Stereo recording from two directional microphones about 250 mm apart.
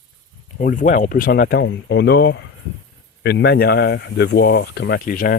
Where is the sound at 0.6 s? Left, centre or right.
Left.